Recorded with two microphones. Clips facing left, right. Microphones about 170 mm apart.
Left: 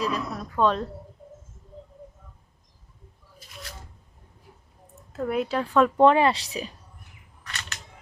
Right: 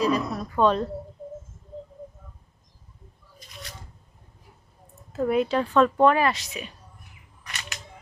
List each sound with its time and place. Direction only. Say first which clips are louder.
0.0 s a woman's voice: right 5 dB; centre (ahead or behind)
3.3 s shuffling cards: even; centre (ahead or behind)
5.1 s a woman's voice: right 3 dB; centre (ahead or behind)
6.0 s speech: left 2 dB; 25° left (ahead or behind)